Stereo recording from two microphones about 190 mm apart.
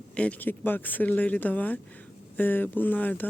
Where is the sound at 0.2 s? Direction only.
10° left (ahead or behind).